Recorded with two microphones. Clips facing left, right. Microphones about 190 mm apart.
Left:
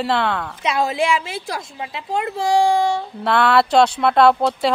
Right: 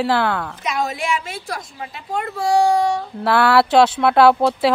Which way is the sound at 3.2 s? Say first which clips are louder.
Right 1 dB; 5° right (ahead or behind).